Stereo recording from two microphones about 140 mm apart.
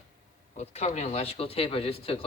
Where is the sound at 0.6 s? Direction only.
55° left (ahead or behind).